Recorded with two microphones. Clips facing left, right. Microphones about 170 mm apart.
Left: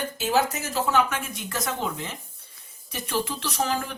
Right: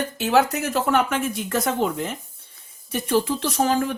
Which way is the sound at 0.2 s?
65° right (ahead or behind).